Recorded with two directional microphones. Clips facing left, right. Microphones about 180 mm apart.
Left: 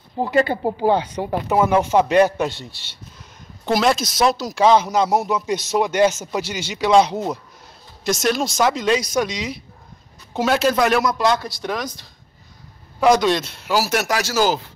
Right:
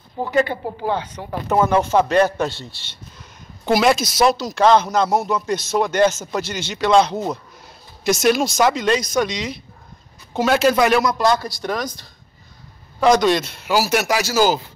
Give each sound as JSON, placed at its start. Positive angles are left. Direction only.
{"t": 0.2, "sound": "speech", "side_deg": 30}
{"t": 1.5, "sound": "speech", "side_deg": 10}
{"t": 3.6, "sound": "speech", "side_deg": -5}
{"t": 8.0, "sound": "speech", "side_deg": -5}